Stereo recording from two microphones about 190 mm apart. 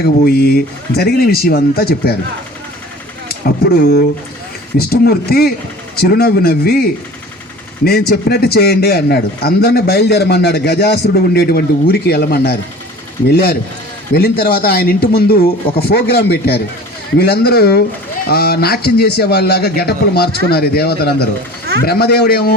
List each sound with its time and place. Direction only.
0.3 s speech: 55° left (ahead or behind)
3.2 s a sound: 55° left (ahead or behind)
4.8 s a man's voice: 55° left (ahead or behind)
7.9 s a man's voice: 55° left (ahead or behind)